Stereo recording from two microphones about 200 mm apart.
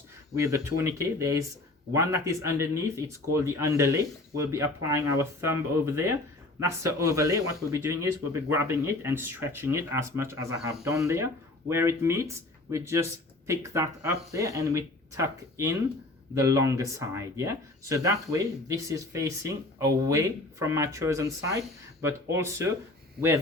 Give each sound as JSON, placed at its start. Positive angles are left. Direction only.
{"t": 0.3, "sound": "speech", "side_deg": -15}